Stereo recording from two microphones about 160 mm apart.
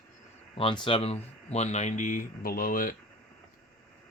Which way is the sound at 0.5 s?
30° left (ahead or behind).